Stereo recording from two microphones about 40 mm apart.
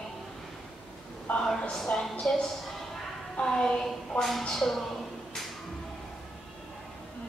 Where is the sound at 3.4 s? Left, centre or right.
Left.